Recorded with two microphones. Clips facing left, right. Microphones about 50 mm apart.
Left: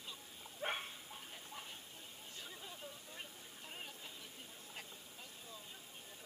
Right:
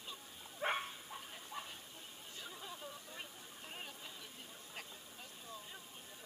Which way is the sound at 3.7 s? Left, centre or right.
Centre.